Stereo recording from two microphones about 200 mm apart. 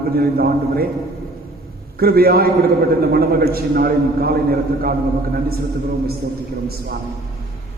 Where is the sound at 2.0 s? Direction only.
50° right (ahead or behind).